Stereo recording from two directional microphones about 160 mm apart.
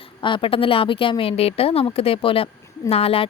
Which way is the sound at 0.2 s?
30° left (ahead or behind).